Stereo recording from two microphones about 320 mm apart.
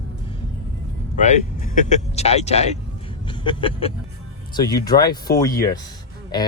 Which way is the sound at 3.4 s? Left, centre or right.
Centre.